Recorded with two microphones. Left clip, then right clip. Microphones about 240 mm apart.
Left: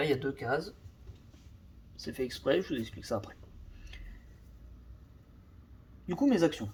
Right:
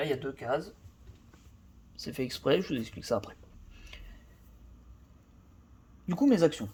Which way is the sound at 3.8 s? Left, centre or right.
Right.